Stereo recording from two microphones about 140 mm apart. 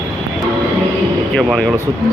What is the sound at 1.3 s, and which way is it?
Speech, centre (ahead or behind).